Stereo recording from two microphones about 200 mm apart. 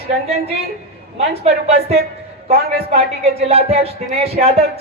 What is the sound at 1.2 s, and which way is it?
A woman's voice, 30° right (ahead or behind).